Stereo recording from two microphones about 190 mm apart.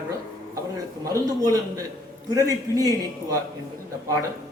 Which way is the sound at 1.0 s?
20° right (ahead or behind).